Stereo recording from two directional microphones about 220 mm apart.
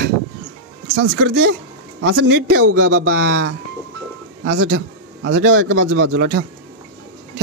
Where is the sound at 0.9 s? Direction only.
60° right (ahead or behind).